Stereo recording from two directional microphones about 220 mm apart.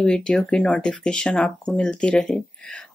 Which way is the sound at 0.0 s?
5° left (ahead or behind).